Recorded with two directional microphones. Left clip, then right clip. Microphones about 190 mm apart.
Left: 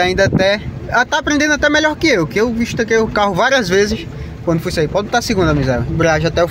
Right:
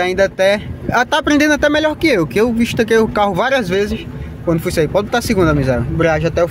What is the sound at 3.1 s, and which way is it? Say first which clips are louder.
Speech: left 1 dB; 5° right (ahead or behind).